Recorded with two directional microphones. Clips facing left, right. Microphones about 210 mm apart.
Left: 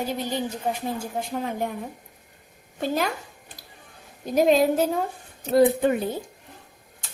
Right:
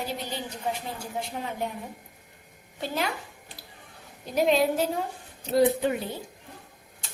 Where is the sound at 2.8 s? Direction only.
45° left (ahead or behind).